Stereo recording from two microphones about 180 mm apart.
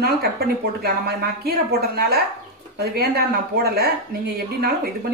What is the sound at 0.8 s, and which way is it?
A woman's voice, 60° right (ahead or behind).